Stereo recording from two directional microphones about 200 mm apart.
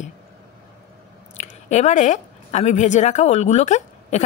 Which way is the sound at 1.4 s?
35° left (ahead or behind).